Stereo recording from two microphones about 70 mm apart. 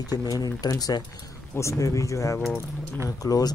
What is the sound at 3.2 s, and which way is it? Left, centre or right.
Speech, left.